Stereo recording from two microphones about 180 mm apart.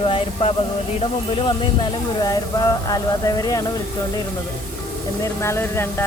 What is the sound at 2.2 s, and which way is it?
Speech, 20° left (ahead or behind).